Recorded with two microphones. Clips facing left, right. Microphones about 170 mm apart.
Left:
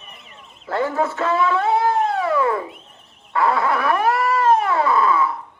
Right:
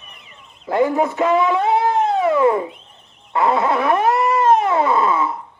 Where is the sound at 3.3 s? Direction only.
20° right (ahead or behind).